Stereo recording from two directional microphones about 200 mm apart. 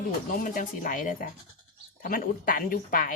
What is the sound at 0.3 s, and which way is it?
Speech, 40° left (ahead or behind).